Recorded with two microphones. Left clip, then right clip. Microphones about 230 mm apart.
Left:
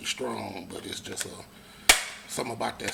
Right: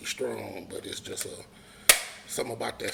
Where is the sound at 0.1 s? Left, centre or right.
Left.